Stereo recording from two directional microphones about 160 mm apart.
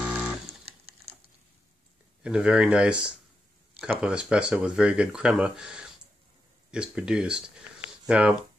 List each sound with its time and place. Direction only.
0.0 s a sound: 5° right (ahead or behind)
0.7 s computer keyboard: 40° right (ahead or behind)
2.2 s speech: 5° right (ahead or behind)